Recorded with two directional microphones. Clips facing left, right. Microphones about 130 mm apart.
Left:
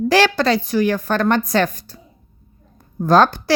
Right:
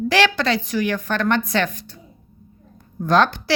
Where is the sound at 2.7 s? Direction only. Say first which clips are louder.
Left 3 dB; 40° left (ahead or behind).